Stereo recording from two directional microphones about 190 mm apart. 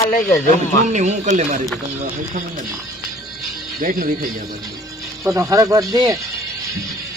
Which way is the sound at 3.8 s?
50° right (ahead or behind).